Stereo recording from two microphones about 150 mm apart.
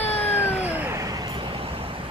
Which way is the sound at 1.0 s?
25° right (ahead or behind).